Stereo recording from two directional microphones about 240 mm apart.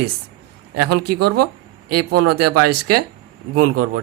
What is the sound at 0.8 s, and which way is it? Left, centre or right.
Speech, right.